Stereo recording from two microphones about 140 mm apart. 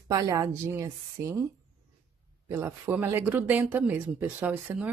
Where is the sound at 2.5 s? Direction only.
15° right (ahead or behind).